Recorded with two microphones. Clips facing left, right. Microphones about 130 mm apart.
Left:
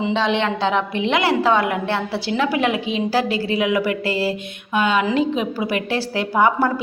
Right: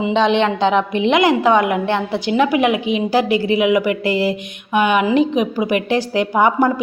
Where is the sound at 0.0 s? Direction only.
20° right (ahead or behind).